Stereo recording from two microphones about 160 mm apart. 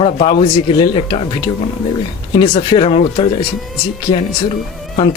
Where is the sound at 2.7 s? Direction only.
35° left (ahead or behind).